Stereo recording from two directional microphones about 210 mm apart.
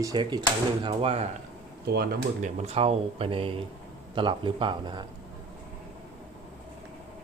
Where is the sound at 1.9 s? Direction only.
45° right (ahead or behind).